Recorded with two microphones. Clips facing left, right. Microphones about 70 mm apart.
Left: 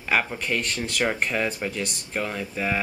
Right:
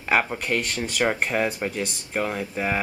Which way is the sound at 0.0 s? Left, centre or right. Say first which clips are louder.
Right 2 dB; centre.